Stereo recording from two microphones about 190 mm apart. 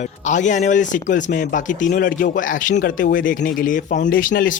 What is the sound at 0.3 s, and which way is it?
A man's voice, 40° left (ahead or behind).